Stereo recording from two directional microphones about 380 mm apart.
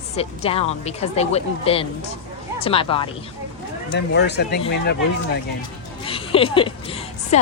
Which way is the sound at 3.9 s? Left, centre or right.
Left.